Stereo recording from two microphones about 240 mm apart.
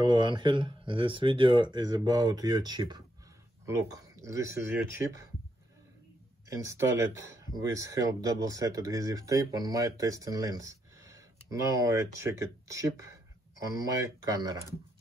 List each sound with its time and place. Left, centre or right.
0.0 s speech: centre
6.5 s speech: centre